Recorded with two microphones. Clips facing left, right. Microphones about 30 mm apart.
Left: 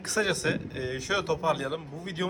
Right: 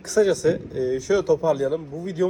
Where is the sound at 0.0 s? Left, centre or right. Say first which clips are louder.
Right 8 dB; left.